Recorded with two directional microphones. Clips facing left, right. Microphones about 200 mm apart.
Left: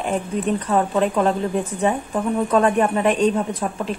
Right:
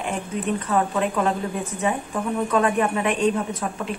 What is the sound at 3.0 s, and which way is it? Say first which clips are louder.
Speech: left 4 dB; 35° left (ahead or behind).